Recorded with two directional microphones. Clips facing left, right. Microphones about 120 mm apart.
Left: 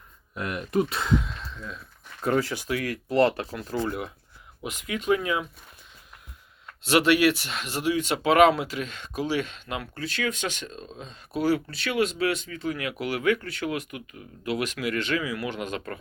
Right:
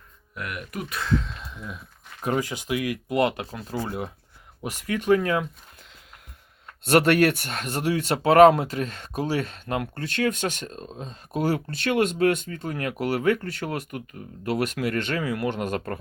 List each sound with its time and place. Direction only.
0.3 s speech: 30° left (ahead or behind)
1.5 s speech: 15° right (ahead or behind)
3.8 s speech: 25° right (ahead or behind)
4.6 s speech: 40° right (ahead or behind)
6.8 s speech: 50° right (ahead or behind)
8.2 s speech: 40° right (ahead or behind)